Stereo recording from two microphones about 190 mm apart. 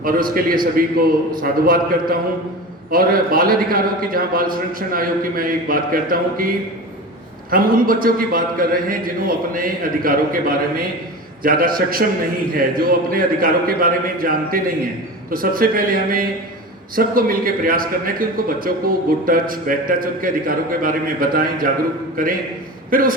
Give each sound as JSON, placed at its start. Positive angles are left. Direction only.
{"t": 0.0, "sound": "a man's voice", "side_deg": -50}
{"t": 7.5, "sound": "a man's voice", "side_deg": -50}